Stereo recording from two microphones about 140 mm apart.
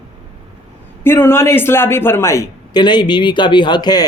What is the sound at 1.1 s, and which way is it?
A man's voice, 15° left (ahead or behind).